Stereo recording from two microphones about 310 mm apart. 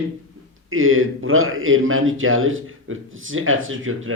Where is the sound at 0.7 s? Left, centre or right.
Right.